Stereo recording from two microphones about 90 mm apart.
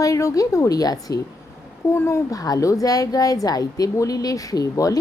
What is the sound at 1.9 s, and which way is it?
Speech, 30° left (ahead or behind).